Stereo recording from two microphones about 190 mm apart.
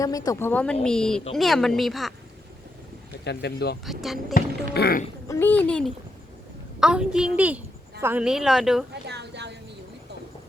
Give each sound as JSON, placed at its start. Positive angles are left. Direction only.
{"t": 0.0, "sound": "speech", "side_deg": 20}
{"t": 3.2, "sound": "speech", "side_deg": 60}
{"t": 3.8, "sound": "speech", "side_deg": 0}
{"t": 4.4, "sound": "speech", "side_deg": 55}
{"t": 5.3, "sound": "speech", "side_deg": 10}
{"t": 8.9, "sound": "a woman's voice", "side_deg": -60}